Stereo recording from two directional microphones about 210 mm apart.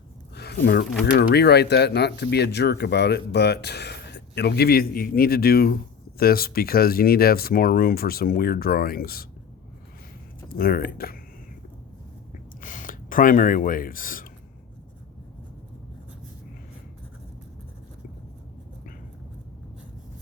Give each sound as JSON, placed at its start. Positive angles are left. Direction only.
{"t": 0.3, "sound": "a sound", "side_deg": 50}
{"t": 1.1, "sound": "speech", "side_deg": 50}
{"t": 10.5, "sound": "speech", "side_deg": 45}
{"t": 12.6, "sound": "speech", "side_deg": 40}